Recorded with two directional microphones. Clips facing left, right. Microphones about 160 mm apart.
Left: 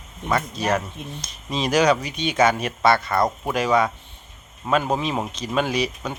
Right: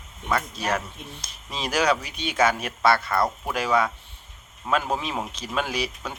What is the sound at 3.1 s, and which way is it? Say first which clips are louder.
Speech: left 3 dB; 15° left (ahead or behind).